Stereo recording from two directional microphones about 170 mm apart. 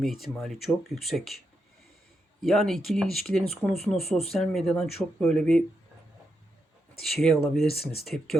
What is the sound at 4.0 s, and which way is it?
Speech, 35° left (ahead or behind).